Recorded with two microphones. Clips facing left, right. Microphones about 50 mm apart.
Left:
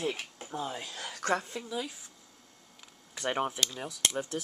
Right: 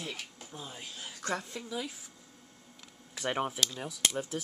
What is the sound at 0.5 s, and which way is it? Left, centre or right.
Speech, left.